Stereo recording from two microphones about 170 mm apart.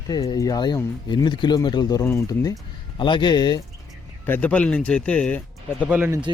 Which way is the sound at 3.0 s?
30° left (ahead or behind).